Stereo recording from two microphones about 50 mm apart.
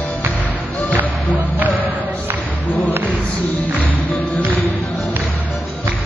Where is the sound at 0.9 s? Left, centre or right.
Right.